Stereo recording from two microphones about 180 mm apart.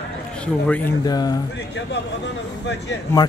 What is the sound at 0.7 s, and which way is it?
Speech, 10° left (ahead or behind).